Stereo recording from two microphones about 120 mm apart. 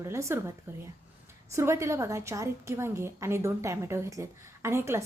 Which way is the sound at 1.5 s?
25° right (ahead or behind).